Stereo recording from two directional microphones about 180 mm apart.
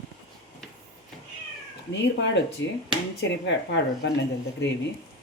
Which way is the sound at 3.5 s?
80° left.